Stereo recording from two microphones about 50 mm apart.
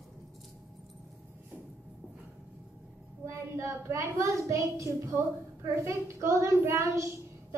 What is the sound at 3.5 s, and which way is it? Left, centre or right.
A woman's voice, right.